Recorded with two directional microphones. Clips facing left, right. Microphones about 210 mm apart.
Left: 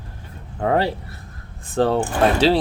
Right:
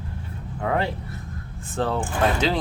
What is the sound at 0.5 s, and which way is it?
Speech, 35° left (ahead or behind).